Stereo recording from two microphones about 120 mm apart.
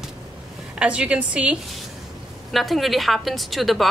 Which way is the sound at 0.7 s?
10° right (ahead or behind).